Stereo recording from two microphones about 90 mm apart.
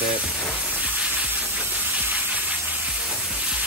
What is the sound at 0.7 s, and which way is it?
Steam, 15° right (ahead or behind).